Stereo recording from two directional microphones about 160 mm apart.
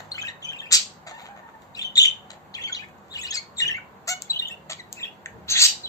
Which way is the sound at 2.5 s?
20° left (ahead or behind).